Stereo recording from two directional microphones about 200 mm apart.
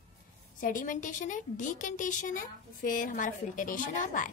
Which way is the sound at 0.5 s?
40° left (ahead or behind).